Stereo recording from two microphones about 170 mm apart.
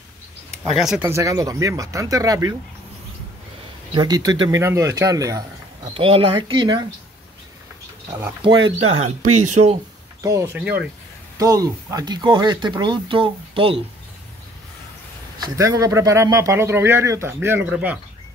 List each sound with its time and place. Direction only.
0.7 s speech: 5° right (ahead or behind); by 2.5 s 20° right (ahead or behind)
3.9 s speech: 25° right (ahead or behind)
5.9 s speech: 30° right (ahead or behind)
8.2 s speech: 25° right (ahead or behind)
9.0 s speech: 40° right (ahead or behind)
10.2 s a man's voice: 15° right (ahead or behind)
11.3 s speech: 20° right (ahead or behind)
15.3 s a man's voice: 20° right (ahead or behind)